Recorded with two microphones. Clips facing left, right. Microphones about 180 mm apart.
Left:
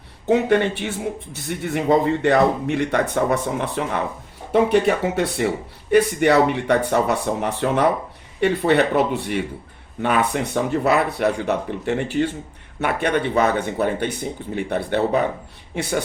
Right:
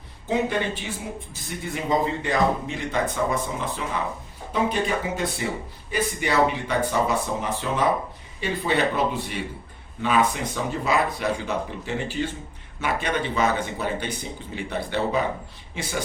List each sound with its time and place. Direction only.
0.3 s speech: 65° left (ahead or behind)